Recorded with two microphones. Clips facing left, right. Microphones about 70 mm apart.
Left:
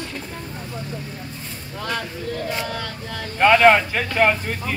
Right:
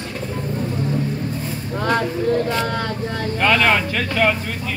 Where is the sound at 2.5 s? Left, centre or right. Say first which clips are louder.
Right 5 dB; right.